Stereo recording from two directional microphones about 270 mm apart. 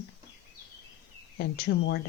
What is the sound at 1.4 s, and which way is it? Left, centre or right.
Speech, left.